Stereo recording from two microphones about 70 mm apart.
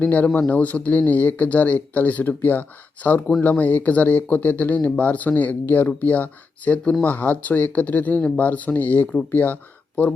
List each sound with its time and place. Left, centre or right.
0.0 s speech: left